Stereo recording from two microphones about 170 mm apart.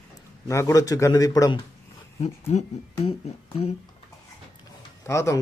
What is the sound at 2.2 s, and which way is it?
Speech, 40° left (ahead or behind).